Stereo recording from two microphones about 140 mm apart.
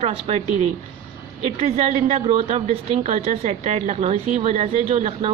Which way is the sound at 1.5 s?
45° right (ahead or behind).